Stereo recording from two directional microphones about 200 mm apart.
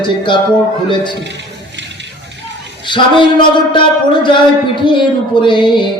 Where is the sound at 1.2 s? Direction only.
60° right (ahead or behind).